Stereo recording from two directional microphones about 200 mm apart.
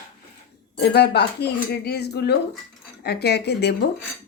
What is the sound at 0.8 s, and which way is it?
Speech, 55° left (ahead or behind).